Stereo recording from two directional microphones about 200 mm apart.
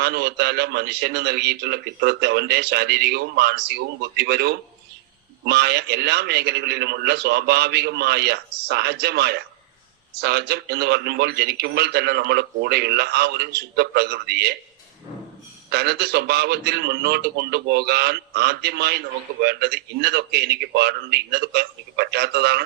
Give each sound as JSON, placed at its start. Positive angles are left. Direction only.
{"t": 0.0, "sound": "a man's voice", "side_deg": -55}
{"t": 15.7, "sound": "a man's voice", "side_deg": -55}